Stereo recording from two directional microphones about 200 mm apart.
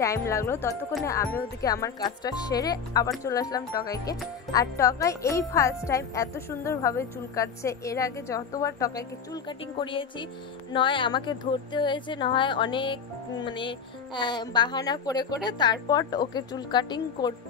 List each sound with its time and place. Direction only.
0.0 s a woman's voice: 15° left (ahead or behind)